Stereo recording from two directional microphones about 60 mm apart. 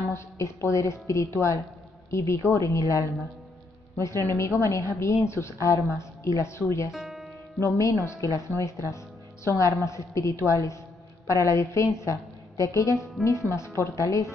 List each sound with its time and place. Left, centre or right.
0.1 s a woman's voice: left
6.9 s music: centre
8.0 s a woman's voice: left